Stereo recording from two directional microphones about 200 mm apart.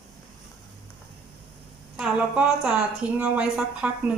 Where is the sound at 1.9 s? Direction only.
5° right (ahead or behind).